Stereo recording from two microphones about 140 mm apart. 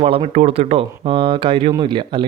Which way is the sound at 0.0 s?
50° right (ahead or behind).